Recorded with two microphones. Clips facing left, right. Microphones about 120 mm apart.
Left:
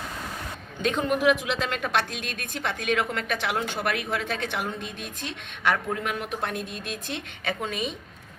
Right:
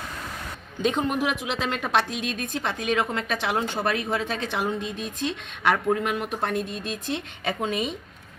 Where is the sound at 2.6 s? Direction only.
30° right (ahead or behind).